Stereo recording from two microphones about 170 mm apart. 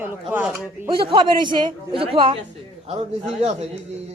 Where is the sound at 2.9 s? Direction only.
40° right (ahead or behind).